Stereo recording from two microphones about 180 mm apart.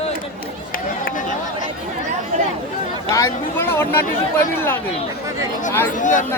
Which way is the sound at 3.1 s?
15° left (ahead or behind).